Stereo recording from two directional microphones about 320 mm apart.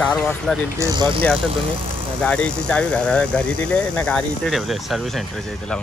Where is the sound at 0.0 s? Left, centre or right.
Centre.